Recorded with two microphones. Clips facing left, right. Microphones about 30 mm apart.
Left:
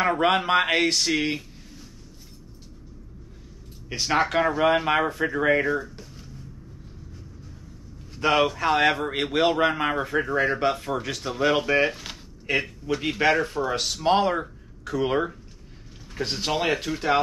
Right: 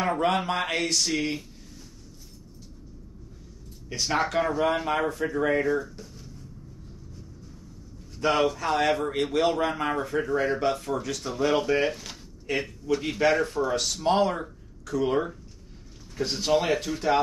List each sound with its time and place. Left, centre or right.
0.0 s speech: left
3.9 s a man's voice: left
8.1 s a man's voice: left